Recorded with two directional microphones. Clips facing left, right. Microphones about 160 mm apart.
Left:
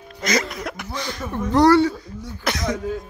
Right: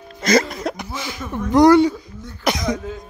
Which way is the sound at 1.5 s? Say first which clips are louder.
Right 3 dB; 15° right (ahead or behind).